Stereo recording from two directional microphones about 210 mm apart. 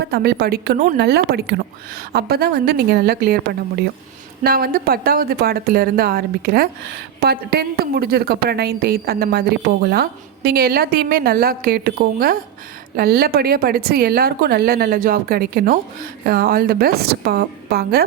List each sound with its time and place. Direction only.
0.0 s a woman's voice: 50° right (ahead or behind)
4.4 s a woman's voice: 45° right (ahead or behind)